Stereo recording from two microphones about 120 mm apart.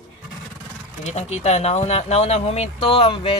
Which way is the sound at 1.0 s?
65° left (ahead or behind).